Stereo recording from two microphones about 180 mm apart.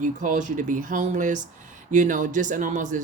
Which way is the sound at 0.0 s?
45° right (ahead or behind).